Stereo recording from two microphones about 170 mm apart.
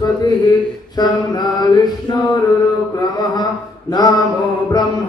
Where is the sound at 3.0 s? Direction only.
25° left (ahead or behind).